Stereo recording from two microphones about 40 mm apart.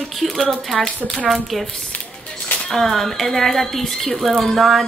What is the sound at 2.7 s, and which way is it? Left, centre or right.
Speech, centre.